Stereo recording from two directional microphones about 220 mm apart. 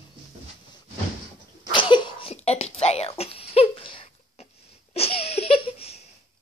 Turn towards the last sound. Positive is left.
turn(degrees=25)  # may be behind; listen again after turning